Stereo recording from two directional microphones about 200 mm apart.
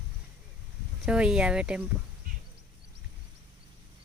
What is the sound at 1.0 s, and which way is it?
Speech, 5° right (ahead or behind).